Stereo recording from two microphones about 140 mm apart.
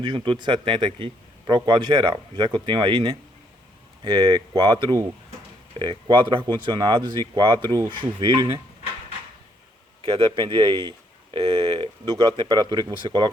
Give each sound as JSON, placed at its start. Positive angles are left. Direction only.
{"t": 0.0, "sound": "speech", "side_deg": -30}
{"t": 10.0, "sound": "speech", "side_deg": -35}